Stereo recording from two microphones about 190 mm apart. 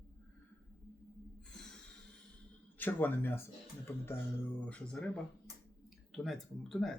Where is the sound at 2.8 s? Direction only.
10° left (ahead or behind).